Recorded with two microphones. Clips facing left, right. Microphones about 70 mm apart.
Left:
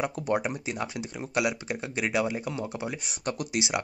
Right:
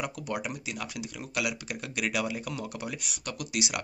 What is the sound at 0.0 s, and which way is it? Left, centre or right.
Speech, left.